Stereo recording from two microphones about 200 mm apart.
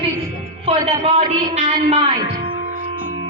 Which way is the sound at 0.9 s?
30° right (ahead or behind).